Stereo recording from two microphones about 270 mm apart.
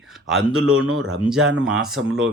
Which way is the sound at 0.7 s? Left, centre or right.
Right.